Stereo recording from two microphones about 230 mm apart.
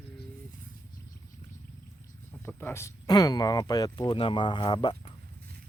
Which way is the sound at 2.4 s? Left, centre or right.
Centre.